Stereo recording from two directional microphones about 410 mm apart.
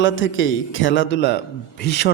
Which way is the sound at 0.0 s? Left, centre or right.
Left.